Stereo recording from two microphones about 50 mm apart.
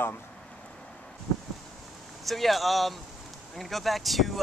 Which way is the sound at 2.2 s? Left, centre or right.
Centre.